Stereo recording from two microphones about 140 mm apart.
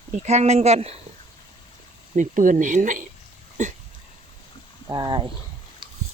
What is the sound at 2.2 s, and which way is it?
Speech, 65° right (ahead or behind).